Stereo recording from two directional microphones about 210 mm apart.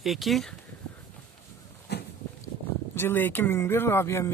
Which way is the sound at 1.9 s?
55° left (ahead or behind).